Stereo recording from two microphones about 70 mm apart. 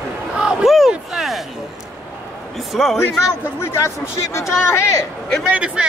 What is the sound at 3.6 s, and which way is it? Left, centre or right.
Speech, left.